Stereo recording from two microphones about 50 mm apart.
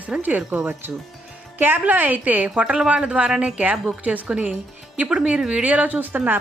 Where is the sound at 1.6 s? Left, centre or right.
Right.